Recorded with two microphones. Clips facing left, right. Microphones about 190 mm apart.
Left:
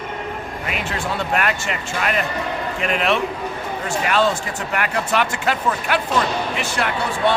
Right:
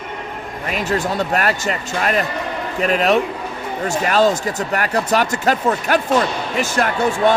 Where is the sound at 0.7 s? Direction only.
40° right (ahead or behind).